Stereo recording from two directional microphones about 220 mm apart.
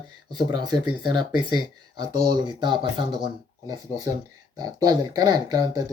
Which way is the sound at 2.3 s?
20° right (ahead or behind).